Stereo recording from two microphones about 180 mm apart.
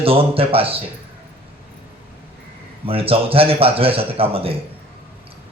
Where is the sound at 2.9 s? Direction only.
30° right (ahead or behind).